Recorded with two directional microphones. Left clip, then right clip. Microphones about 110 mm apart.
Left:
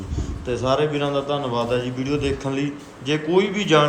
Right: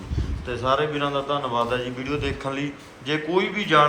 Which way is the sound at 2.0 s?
15° left (ahead or behind).